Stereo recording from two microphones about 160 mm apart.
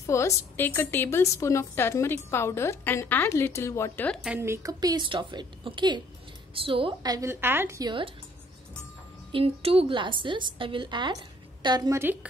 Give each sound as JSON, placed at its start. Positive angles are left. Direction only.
{"t": 0.0, "sound": "a woman's voice", "side_deg": 20}
{"t": 4.4, "sound": "a woman's voice", "side_deg": -20}
{"t": 9.3, "sound": "a woman's voice", "side_deg": -35}
{"t": 12.0, "sound": "a woman's voice", "side_deg": -10}